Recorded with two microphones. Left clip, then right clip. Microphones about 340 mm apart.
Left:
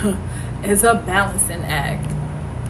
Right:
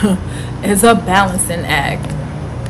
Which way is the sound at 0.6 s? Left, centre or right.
Right.